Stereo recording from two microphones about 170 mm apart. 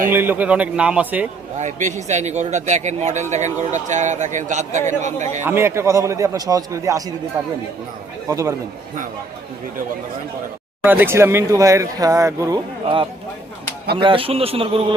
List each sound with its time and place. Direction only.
0.1 s a man's voice: 10° right (ahead or behind)
1.5 s a man's voice: 45° right (ahead or behind)
5.5 s a man's voice: 15° right (ahead or behind)
8.3 s speech: 20° right (ahead or behind)
10.8 s a man's voice: 10° right (ahead or behind); by 14.9 s 35° right (ahead or behind)